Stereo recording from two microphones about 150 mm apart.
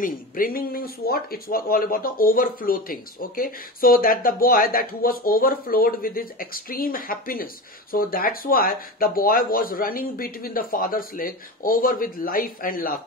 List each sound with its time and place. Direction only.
0.0 s speech: 70° left (ahead or behind)